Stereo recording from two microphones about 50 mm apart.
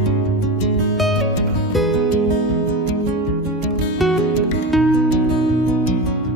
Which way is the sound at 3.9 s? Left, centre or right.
Centre.